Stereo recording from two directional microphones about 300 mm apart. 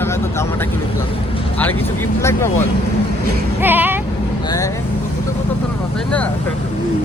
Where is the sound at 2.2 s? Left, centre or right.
Centre.